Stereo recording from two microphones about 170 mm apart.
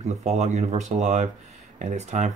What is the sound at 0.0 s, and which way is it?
Speech, 40° right (ahead or behind).